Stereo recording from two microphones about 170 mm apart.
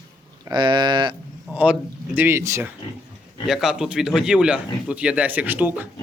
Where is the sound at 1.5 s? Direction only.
10° right (ahead or behind).